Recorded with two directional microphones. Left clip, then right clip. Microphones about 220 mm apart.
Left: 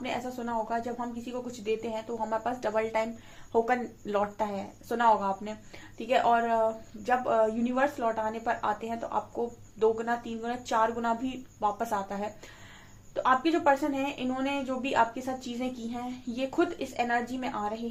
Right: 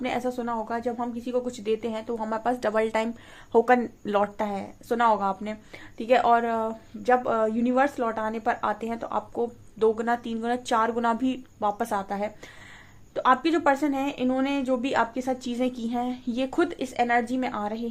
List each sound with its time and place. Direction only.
0.0 s speech: 45° right (ahead or behind)